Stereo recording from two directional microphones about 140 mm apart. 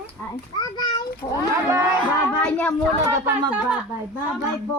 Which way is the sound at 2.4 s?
10° left (ahead or behind).